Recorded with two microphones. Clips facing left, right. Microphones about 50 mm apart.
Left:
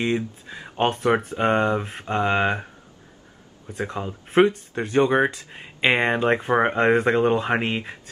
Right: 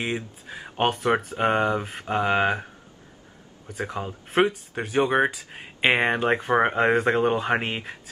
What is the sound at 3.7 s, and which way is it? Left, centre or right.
Speech, centre.